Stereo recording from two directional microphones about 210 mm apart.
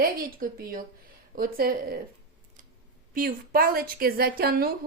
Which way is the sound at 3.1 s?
45° right (ahead or behind).